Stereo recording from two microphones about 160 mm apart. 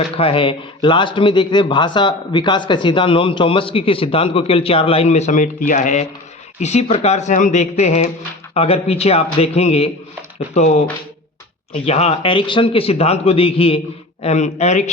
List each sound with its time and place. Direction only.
0.2 s speech: 35° left (ahead or behind)